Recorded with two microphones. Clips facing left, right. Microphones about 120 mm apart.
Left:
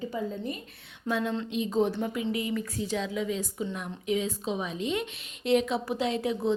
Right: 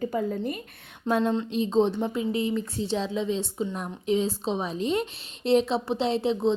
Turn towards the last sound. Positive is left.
turn(degrees=-25)  # may be behind; listen again after turning